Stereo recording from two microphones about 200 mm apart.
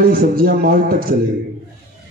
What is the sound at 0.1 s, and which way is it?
A man's voice, 45° right (ahead or behind).